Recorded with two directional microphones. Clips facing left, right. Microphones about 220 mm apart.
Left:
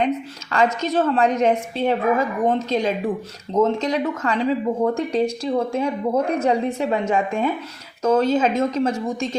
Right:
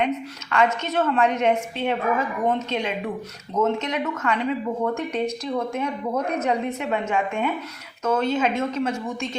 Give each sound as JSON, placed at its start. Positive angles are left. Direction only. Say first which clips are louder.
{"t": 0.5, "sound": "speech", "louder": "left 2 dB", "side_deg": 35}